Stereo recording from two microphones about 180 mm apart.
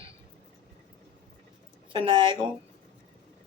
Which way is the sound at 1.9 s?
30° right (ahead or behind).